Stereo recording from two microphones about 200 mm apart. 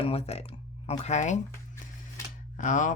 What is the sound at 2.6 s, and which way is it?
Speech, 40° left (ahead or behind).